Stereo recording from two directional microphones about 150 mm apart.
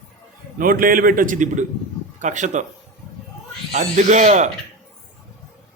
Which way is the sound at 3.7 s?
55° right (ahead or behind).